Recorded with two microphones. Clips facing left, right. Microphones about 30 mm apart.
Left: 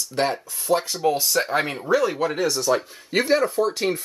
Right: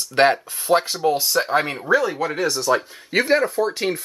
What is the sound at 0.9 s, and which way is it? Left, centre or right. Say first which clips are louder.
Speech: right 2 dB; centre.